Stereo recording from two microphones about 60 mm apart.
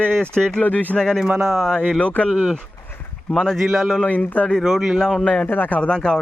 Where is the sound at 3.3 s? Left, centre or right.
Centre.